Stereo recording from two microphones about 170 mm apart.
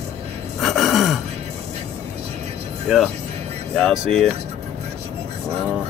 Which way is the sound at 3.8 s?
Centre (ahead or behind).